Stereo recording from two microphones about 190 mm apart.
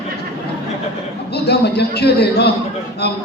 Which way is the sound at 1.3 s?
60° left (ahead or behind).